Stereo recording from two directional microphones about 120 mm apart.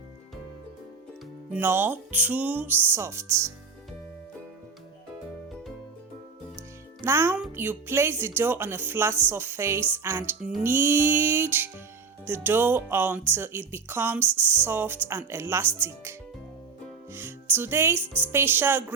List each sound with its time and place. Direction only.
1.5 s speech: 20° right (ahead or behind)
7.0 s a child's voice: 20° right (ahead or behind)
17.1 s music: 20° right (ahead or behind)
18.2 s speech: 20° right (ahead or behind)